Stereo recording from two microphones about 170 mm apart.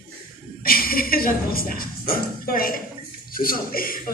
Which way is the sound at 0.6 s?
60° left (ahead or behind).